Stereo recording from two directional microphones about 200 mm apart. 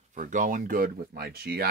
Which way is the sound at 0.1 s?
40° right (ahead or behind).